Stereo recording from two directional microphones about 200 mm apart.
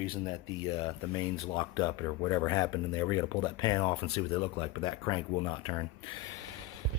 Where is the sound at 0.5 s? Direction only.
25° left (ahead or behind).